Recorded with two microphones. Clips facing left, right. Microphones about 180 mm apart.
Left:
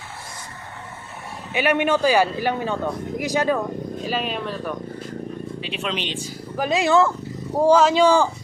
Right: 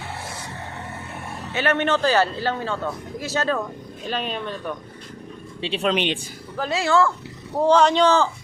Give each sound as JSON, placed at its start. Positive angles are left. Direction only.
{"t": 1.5, "sound": "a man's voice", "side_deg": 10}
{"t": 5.6, "sound": "speech", "side_deg": -30}
{"t": 5.9, "sound": "a man's voice", "side_deg": -60}
{"t": 6.6, "sound": "a man's voice", "side_deg": 15}